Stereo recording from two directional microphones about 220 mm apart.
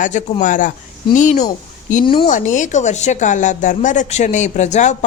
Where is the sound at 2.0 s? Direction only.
20° left (ahead or behind).